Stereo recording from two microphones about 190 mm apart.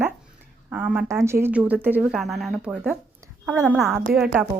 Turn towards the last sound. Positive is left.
turn(degrees=0)  # may be behind; listen again after turning